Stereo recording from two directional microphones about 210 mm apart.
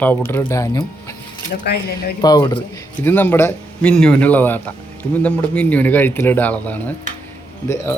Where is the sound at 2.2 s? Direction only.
20° left (ahead or behind).